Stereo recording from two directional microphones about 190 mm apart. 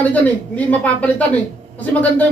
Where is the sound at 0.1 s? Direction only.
10° left (ahead or behind).